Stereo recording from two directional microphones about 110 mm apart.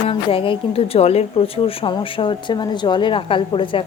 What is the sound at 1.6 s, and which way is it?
A woman's voice, 50° left (ahead or behind).